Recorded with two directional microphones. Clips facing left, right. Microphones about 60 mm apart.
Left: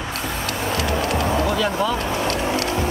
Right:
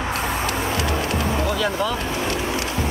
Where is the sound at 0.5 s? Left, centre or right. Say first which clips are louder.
Even; centre.